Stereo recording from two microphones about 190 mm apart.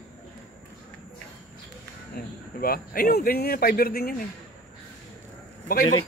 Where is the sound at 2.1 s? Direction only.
50° left (ahead or behind).